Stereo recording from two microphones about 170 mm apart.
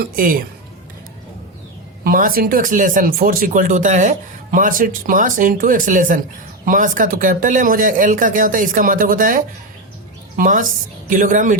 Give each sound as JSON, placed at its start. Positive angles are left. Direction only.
{"t": 0.0, "sound": "a woman's voice", "side_deg": -55}
{"t": 2.0, "sound": "speech", "side_deg": -55}